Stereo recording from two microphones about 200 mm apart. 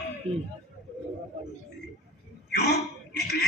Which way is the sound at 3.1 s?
55° left (ahead or behind).